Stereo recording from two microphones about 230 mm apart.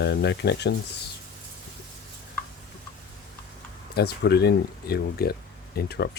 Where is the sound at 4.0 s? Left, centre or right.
Left.